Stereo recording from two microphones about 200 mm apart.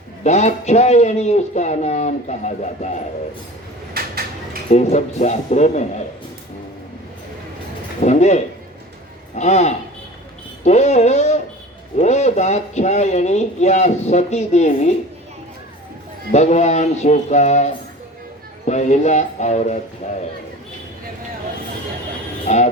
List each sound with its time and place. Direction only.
0.3 s speech: 35° left (ahead or behind)
4.0 s a sound: 50° right (ahead or behind)
4.7 s speech: 35° left (ahead or behind)
8.0 s speech: 35° left (ahead or behind)
16.3 s speech: 35° left (ahead or behind)
22.4 s music: 35° left (ahead or behind)